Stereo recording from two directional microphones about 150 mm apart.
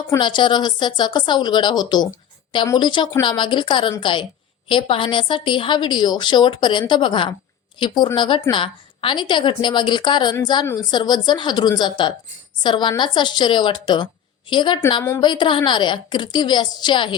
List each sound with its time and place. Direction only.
0.2 s a woman's voice: 30° left (ahead or behind)